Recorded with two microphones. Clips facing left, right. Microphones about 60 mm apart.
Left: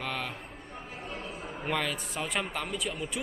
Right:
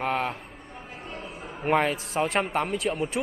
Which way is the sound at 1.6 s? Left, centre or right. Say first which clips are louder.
Right 9 dB; right.